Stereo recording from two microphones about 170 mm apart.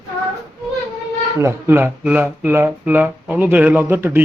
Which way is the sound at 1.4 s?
15° right (ahead or behind).